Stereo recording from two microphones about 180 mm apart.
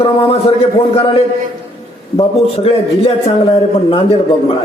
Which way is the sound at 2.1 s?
35° left (ahead or behind).